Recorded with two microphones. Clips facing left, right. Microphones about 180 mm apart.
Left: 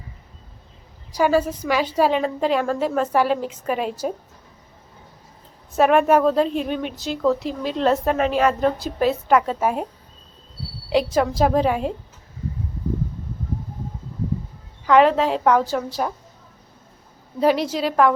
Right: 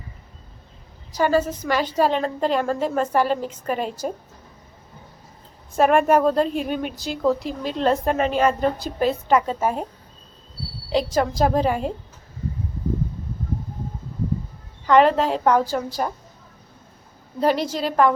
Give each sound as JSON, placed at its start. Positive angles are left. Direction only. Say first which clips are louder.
{"t": 1.1, "sound": "a woman's voice", "louder": "left 1 dB", "side_deg": 10}
{"t": 5.7, "sound": "a woman's voice", "louder": "left 1 dB", "side_deg": 0}
{"t": 10.8, "sound": "a woman's voice", "louder": "left 2 dB", "side_deg": 5}
{"t": 14.8, "sound": "a woman's voice", "louder": "left 1 dB", "side_deg": 0}
{"t": 17.4, "sound": "a woman's voice", "louder": "left 2 dB", "side_deg": 0}